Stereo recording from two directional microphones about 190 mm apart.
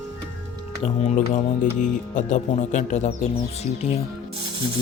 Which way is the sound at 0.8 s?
35° left (ahead or behind).